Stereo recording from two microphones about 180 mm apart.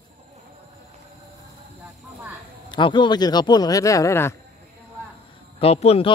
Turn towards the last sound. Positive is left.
turn(degrees=35)  # may be behind; listen again after turning